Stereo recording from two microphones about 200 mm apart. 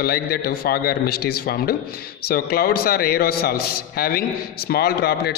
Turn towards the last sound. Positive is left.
turn(degrees=50)  # may be behind; listen again after turning